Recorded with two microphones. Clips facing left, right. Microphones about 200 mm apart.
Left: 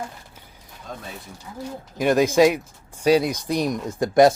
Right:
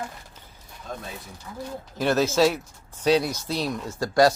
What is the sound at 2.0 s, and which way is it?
A woman's voice, 15° left (ahead or behind).